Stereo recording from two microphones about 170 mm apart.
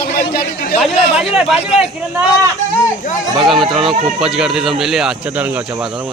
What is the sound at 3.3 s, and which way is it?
Speech, centre (ahead or behind).